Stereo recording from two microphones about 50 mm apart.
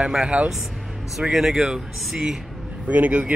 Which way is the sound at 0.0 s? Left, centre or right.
Right.